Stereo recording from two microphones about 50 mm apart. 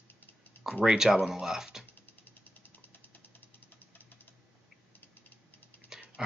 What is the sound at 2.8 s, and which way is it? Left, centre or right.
Ratchet, left.